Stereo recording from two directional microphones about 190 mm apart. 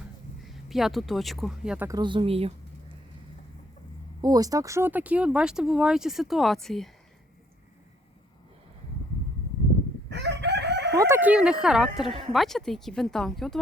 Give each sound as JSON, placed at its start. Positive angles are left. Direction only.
{"t": 0.4, "sound": "speech", "side_deg": 0}
{"t": 1.9, "sound": "speech", "side_deg": -25}
{"t": 4.2, "sound": "speech", "side_deg": -20}
{"t": 10.1, "sound": "chicken", "side_deg": -65}
{"t": 10.9, "sound": "speech", "side_deg": -15}